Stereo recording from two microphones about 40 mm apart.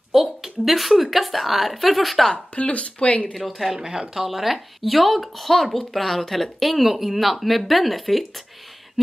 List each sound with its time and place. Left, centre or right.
0.1 s a woman's voice: centre
2.3 s speech: left
3.3 s speech: centre
3.7 s speech: centre